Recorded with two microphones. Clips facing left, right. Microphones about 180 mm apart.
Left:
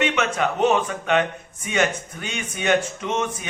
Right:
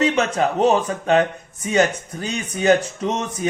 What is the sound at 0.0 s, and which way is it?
A man's voice, 35° right (ahead or behind).